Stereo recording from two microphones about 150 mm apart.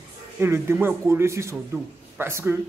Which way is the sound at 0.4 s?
15° right (ahead or behind).